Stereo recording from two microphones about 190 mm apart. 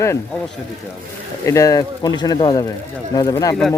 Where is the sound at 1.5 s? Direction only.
15° left (ahead or behind).